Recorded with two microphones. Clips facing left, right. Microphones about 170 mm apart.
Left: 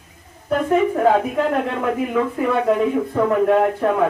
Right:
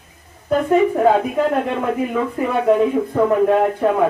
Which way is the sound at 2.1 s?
10° right (ahead or behind).